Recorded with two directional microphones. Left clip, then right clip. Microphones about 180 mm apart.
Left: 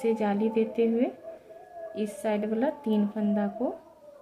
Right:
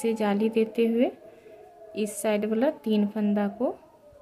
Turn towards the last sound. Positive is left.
turn(degrees=-30)  # may be behind; listen again after turning